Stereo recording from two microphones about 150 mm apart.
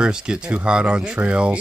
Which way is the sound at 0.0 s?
5° right (ahead or behind).